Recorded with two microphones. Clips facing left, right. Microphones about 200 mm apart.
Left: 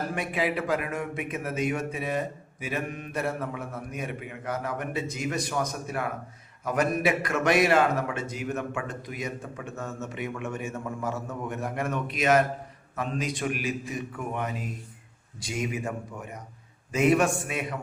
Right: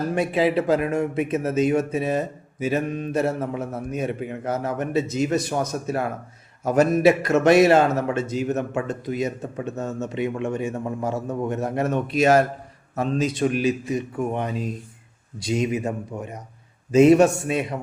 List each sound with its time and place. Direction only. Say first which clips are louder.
0.1 s a man's voice: right 8 dB; 30° right (ahead or behind)
3.2 s a man's voice: right 6 dB; 40° right (ahead or behind)
3.9 s a man's voice: right 11 dB; 25° right (ahead or behind)